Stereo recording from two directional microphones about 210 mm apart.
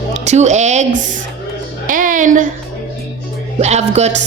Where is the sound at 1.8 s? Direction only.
40° right (ahead or behind).